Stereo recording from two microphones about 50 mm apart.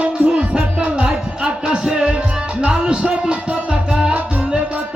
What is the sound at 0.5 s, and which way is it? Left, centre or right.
Music, centre.